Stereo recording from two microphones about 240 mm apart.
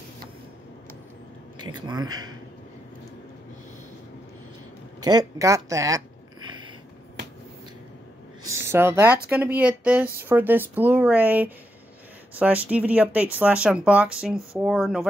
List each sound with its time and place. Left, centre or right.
1.6 s speech: centre
5.0 s speech: centre
8.6 s speech: centre